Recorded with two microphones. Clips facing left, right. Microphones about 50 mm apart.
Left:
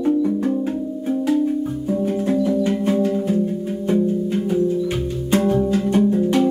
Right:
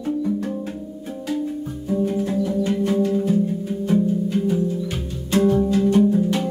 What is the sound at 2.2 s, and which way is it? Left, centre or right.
Music, centre.